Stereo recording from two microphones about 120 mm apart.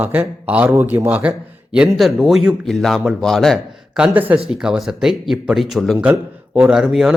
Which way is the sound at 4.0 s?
15° right (ahead or behind).